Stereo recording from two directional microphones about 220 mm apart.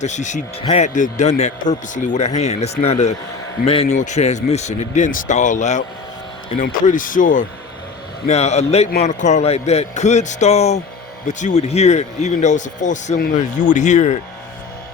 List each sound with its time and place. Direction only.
0.0 s a man's voice: 35° left (ahead or behind)